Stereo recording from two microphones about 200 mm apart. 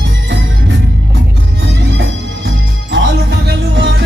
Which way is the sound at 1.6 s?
60° right (ahead or behind).